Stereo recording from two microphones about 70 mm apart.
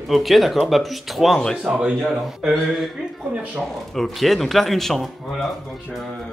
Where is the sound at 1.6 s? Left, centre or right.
Centre.